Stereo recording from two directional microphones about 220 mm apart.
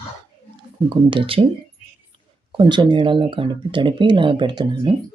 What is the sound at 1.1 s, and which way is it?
Speech, 25° right (ahead or behind).